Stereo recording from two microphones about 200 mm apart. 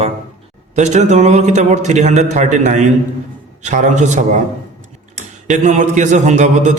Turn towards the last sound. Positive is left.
turn(degrees=-35)  # may be behind; listen again after turning